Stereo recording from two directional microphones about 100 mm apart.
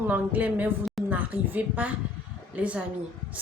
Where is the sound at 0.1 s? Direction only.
15° right (ahead or behind).